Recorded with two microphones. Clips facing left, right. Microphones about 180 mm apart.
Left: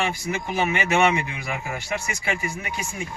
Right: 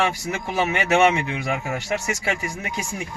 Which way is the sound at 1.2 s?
75° right (ahead or behind).